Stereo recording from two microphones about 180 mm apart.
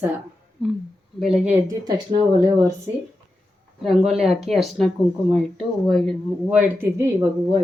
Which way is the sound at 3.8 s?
Centre (ahead or behind).